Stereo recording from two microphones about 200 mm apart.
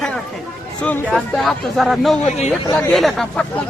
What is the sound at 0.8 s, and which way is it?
Speech, 5° left (ahead or behind).